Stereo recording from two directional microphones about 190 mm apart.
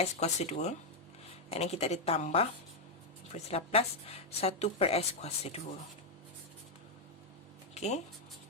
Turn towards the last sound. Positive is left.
turn(degrees=35)  # may be behind; listen again after turning